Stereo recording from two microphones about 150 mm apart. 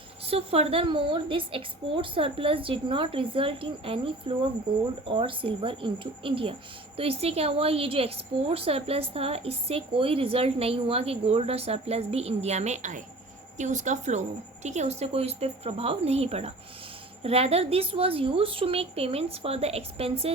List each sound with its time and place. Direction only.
0.3 s speech: 40° right (ahead or behind)